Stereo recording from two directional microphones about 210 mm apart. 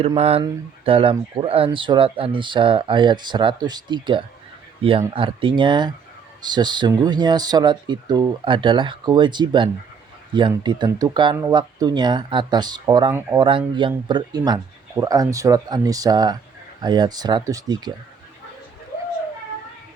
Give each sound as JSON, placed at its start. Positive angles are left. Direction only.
{"t": 0.0, "sound": "speech", "side_deg": -30}